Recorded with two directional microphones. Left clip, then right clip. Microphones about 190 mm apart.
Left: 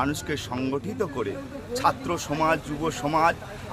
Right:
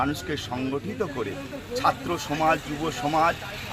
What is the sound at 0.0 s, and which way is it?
Speech, 20° left (ahead or behind).